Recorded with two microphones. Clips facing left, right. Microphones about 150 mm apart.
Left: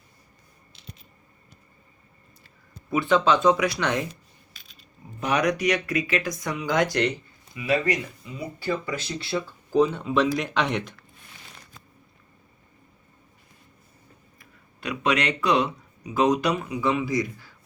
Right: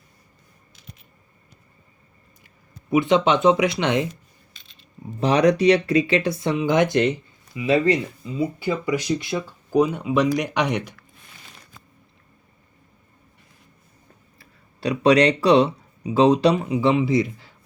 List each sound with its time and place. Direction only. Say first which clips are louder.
2.9 s speech: right 3 dB; 20° right (ahead or behind)
14.3 s speech: right 2 dB; 35° right (ahead or behind)